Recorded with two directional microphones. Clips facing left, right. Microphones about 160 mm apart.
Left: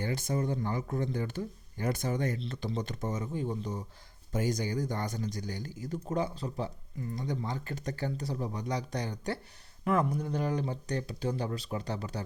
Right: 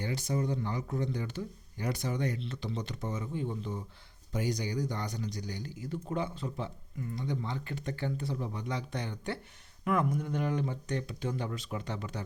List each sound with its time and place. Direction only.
0.0 s speech: 50° left (ahead or behind)